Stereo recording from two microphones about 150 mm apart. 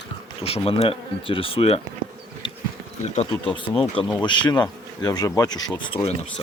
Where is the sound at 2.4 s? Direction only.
35° left (ahead or behind).